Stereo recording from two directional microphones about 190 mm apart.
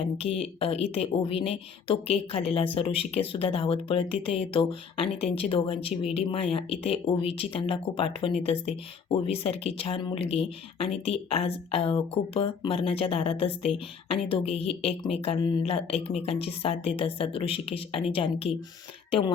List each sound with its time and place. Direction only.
0.2 s speech: 30° left (ahead or behind)